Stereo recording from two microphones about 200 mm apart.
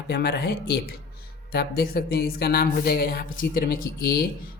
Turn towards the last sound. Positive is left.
turn(degrees=50)  # may be behind; listen again after turning